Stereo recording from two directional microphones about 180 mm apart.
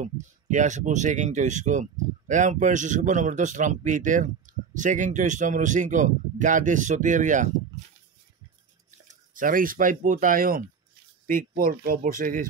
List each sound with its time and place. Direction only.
0.0 s speech: 45° right (ahead or behind)
9.0 s speech: 50° right (ahead or behind)